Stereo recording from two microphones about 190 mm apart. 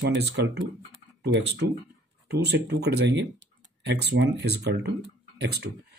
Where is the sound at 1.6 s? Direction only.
65° right (ahead or behind).